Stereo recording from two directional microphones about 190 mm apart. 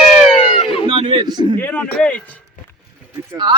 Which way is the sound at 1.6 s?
10° left (ahead or behind).